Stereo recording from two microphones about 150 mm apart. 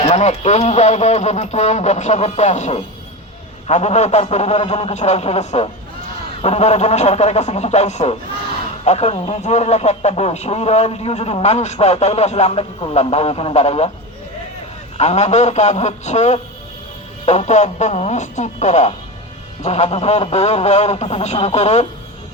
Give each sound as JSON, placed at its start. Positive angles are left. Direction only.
{"t": 0.0, "sound": "a man's voice", "side_deg": 50}
{"t": 14.9, "sound": "a man's voice", "side_deg": 45}